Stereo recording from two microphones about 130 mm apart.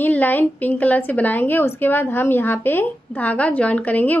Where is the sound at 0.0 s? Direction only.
15° left (ahead or behind).